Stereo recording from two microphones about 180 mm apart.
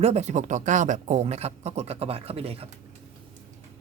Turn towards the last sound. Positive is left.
turn(degrees=-35)  # may be behind; listen again after turning